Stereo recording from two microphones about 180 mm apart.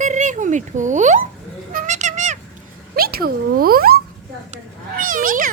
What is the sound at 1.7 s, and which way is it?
Cat, 45° right (ahead or behind).